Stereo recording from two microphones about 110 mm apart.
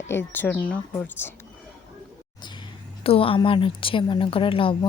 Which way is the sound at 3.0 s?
60° left (ahead or behind).